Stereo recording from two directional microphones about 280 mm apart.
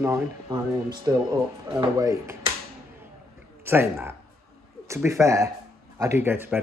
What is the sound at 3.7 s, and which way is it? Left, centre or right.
A man's voice, centre.